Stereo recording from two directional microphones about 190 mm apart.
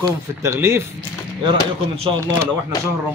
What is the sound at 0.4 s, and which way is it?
Speech, 15° right (ahead or behind).